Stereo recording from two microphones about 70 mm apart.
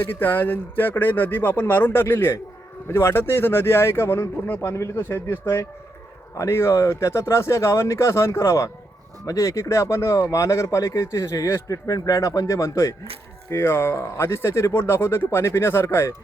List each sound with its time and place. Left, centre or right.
0.0 s speech: left
4.7 s speech: left